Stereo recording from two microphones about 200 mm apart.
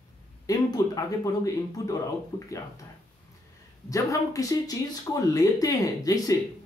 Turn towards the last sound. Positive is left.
turn(degrees=15)  # may be behind; listen again after turning